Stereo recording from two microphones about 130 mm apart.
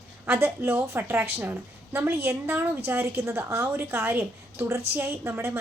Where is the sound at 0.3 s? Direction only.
15° right (ahead or behind).